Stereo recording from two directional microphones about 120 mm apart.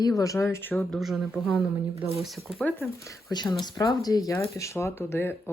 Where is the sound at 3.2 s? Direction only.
35° left (ahead or behind); by 5.3 s 20° left (ahead or behind).